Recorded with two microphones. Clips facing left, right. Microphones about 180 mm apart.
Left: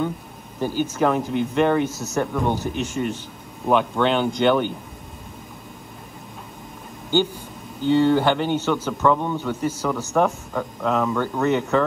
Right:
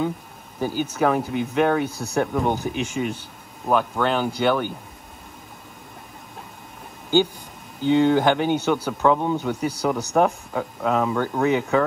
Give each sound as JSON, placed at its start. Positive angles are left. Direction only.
{"t": 0.6, "sound": "a man's voice", "side_deg": -10}
{"t": 7.8, "sound": "a man's voice", "side_deg": -15}